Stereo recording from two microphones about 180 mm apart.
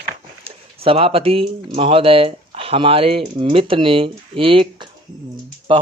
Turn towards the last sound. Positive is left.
turn(degrees=-30)  # may be behind; listen again after turning